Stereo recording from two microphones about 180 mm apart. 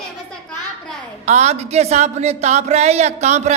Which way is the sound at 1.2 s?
40° right (ahead or behind).